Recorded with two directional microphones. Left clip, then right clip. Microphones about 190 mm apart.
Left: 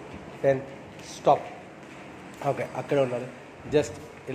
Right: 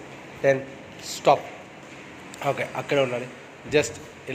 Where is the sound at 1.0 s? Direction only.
Centre (ahead or behind).